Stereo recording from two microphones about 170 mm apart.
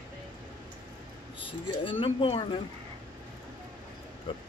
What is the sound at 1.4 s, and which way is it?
Speech, 30° left (ahead or behind).